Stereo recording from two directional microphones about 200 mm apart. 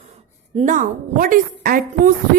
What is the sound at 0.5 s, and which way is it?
A woman's voice, 40° right (ahead or behind).